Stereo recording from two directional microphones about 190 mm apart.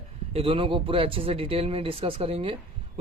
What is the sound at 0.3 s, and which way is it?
Speech, 30° right (ahead or behind).